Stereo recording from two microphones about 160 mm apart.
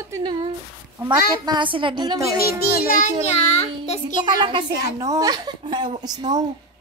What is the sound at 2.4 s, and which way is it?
Child singing, 75° left (ahead or behind).